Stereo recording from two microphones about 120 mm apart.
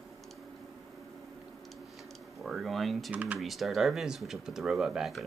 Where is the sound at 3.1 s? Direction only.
10° right (ahead or behind).